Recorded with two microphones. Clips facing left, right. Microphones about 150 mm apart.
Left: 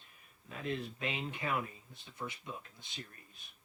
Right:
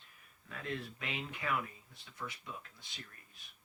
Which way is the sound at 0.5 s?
20° left (ahead or behind).